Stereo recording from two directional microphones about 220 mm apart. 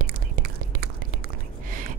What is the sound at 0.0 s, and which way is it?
Whispering, 40° right (ahead or behind).